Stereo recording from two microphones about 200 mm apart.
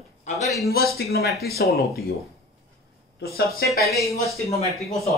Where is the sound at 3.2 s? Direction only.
50° left (ahead or behind).